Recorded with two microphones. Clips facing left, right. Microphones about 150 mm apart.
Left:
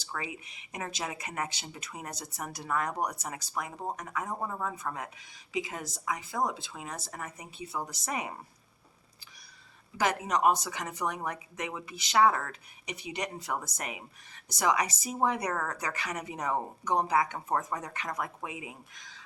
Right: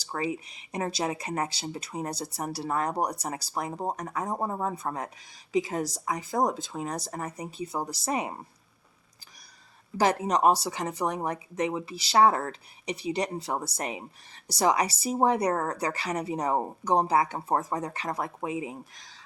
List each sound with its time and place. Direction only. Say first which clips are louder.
0.0 s speech: right 8 dB; 35° right (ahead or behind)
10.0 s speech: right 4 dB; 35° right (ahead or behind)